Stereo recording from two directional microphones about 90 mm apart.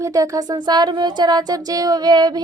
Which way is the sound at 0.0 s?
40° right (ahead or behind).